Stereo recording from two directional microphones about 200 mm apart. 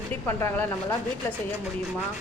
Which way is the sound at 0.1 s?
10° left (ahead or behind).